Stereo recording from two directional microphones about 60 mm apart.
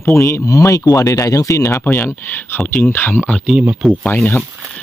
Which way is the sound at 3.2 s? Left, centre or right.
Centre.